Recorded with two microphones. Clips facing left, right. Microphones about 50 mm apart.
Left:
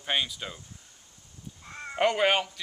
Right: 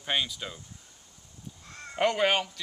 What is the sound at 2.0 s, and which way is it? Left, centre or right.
Speech, centre.